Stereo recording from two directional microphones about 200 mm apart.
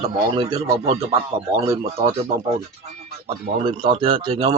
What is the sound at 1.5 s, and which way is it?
Speech, 15° right (ahead or behind).